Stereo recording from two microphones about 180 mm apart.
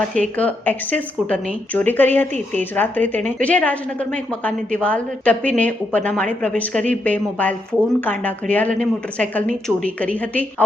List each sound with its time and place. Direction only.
0.3 s a woman's voice: 10° left (ahead or behind)